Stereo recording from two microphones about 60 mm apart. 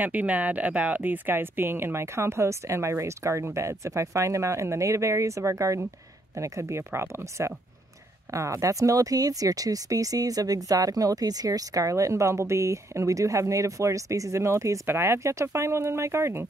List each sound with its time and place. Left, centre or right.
0.0 s speech: right
8.3 s speech: right
14.9 s speech: right